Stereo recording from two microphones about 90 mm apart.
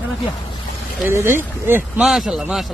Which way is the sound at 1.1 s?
25° right (ahead or behind).